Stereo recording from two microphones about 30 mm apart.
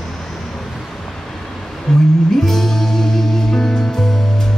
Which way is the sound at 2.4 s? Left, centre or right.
Centre.